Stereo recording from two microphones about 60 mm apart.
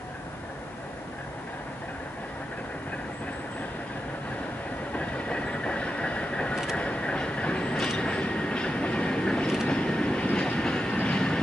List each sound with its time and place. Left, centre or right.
4.9 s train: left